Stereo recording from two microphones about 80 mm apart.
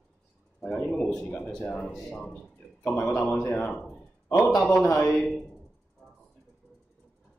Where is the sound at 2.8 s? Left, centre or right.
Centre.